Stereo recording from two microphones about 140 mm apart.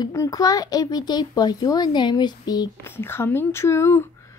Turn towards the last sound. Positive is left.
turn(degrees=20)  # may be behind; listen again after turning